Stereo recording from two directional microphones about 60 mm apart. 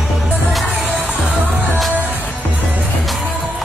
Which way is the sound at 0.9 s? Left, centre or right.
Right.